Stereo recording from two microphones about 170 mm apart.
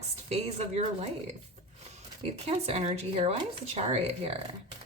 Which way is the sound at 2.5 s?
35° right (ahead or behind).